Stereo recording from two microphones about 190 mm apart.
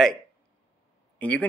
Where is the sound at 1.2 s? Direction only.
5° left (ahead or behind).